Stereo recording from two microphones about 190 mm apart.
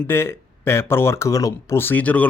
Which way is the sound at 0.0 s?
10° left (ahead or behind).